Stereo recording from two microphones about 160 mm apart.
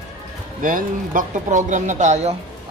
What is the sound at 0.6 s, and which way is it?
Speech, 60° right (ahead or behind).